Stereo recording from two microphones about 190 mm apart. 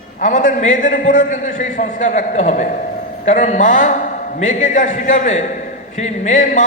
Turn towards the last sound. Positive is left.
turn(degrees=40)  # may be behind; listen again after turning